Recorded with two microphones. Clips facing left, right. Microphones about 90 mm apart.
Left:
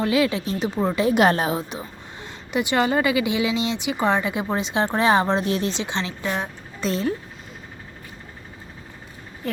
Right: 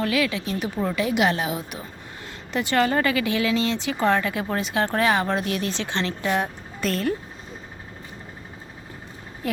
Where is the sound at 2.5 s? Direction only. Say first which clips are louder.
Left 1 dB; 15° left (ahead or behind).